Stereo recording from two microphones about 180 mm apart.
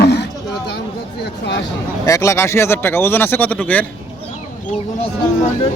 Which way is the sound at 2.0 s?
15° left (ahead or behind).